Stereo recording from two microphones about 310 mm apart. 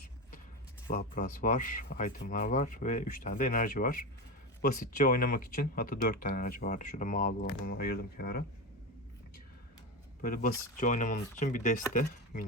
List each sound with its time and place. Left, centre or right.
0.9 s speech: left
10.2 s speech: left